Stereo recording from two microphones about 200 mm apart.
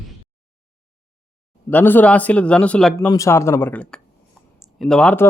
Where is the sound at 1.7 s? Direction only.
10° left (ahead or behind).